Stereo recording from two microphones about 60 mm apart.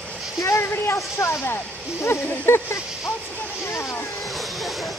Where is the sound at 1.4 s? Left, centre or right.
Left.